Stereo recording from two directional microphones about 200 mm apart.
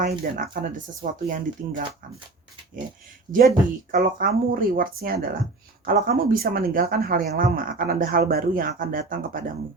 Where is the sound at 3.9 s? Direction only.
45° right (ahead or behind).